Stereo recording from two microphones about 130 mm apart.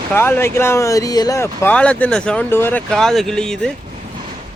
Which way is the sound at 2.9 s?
5° left (ahead or behind).